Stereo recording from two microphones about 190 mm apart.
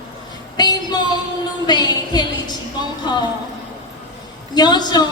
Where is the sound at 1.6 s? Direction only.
20° left (ahead or behind).